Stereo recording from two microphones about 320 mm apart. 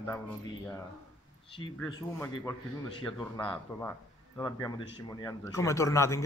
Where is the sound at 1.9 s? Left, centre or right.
Centre.